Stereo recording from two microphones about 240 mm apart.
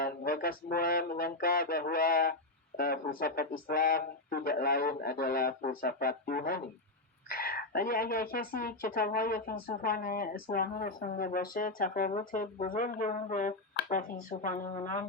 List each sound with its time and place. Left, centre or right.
0.0 s a woman's voice: left